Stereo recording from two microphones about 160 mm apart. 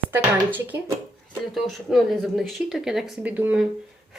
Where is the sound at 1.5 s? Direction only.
Centre (ahead or behind).